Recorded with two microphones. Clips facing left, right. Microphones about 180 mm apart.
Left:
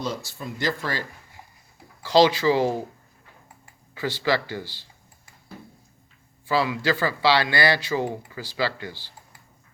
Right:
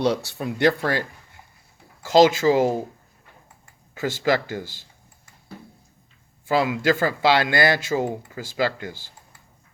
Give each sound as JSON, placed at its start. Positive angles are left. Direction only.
{"t": 0.0, "sound": "speech", "side_deg": -65}
{"t": 2.0, "sound": "speech", "side_deg": -45}
{"t": 3.9, "sound": "speech", "side_deg": -45}
{"t": 6.4, "sound": "speech", "side_deg": -50}